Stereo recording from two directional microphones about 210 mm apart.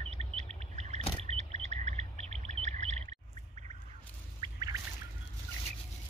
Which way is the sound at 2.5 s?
35° right (ahead or behind).